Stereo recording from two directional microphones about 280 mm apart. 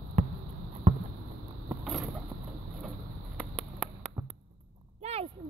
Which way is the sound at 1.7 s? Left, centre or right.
Centre.